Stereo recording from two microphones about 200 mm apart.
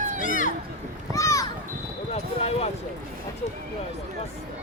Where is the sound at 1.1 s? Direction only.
15° left (ahead or behind).